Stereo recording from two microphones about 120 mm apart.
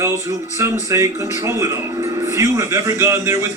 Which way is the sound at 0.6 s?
25° right (ahead or behind).